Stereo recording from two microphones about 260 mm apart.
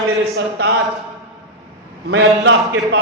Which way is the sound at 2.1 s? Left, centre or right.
Right.